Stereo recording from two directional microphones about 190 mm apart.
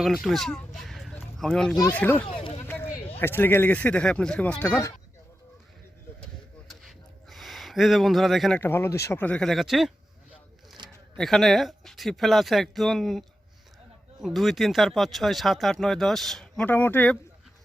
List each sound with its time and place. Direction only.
0.0 s speech: centre (ahead or behind)
0.8 s a sound: centre (ahead or behind)
1.9 s speech: 10° left (ahead or behind)
2.2 s a sound: 30° left (ahead or behind)
3.2 s speech: 10° left (ahead or behind)
6.7 s speech: centre (ahead or behind)
11.2 s speech: centre (ahead or behind)